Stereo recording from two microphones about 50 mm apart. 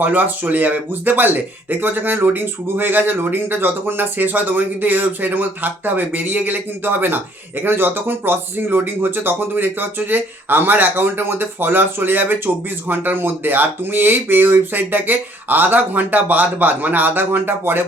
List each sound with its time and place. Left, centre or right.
0.0 s speech: right